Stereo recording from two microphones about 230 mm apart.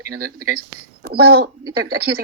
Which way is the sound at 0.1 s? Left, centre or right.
Right.